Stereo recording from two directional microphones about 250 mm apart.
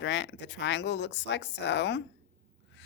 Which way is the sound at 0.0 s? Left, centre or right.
Left.